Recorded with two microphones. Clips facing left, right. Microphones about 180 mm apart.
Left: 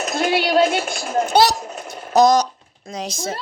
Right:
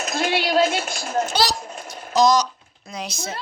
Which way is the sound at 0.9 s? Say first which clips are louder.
Left 3 dB; 35° left (ahead or behind).